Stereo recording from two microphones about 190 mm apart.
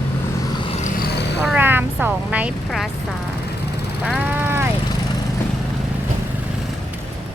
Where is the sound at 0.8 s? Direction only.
55° left (ahead or behind).